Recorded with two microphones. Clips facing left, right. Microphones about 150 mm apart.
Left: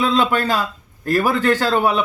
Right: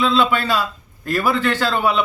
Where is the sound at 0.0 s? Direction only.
40° left (ahead or behind).